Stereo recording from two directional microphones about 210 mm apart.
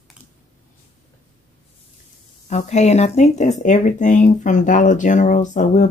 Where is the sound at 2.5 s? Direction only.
35° left (ahead or behind).